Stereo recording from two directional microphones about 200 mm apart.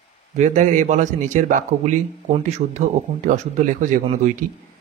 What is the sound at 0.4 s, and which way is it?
Speech, 35° right (ahead or behind).